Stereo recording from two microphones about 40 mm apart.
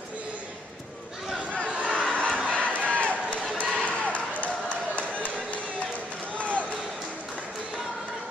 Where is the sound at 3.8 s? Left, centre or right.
Left.